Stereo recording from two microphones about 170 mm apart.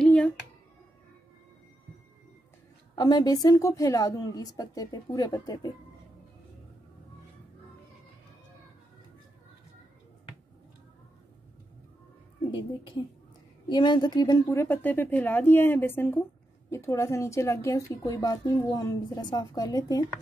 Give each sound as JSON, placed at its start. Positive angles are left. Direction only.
{"t": 0.0, "sound": "a sound", "side_deg": 5}
{"t": 3.0, "sound": "a woman's voice", "side_deg": 25}
{"t": 12.4, "sound": "a woman's voice", "side_deg": 30}